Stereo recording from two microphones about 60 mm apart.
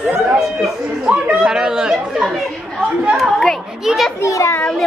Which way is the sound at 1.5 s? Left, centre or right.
Centre.